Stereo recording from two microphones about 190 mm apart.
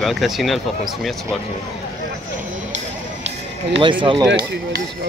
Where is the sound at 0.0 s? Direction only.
Centre (ahead or behind).